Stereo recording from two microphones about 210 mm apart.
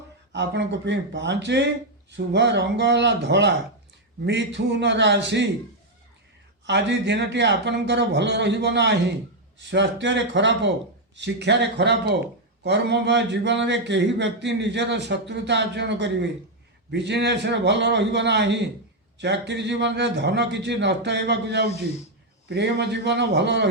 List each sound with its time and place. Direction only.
0.3 s speech: 55° right (ahead or behind)
6.7 s speech: 55° right (ahead or behind)